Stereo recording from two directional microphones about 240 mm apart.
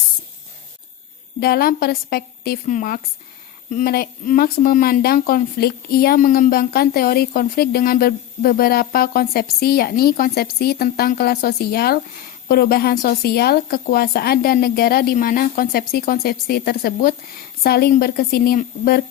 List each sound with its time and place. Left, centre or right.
1.4 s speech: left